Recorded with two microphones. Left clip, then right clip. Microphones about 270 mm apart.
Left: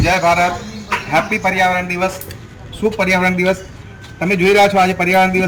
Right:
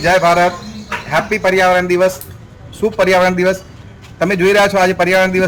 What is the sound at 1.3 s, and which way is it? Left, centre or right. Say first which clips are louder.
Speech: right 6 dB; centre.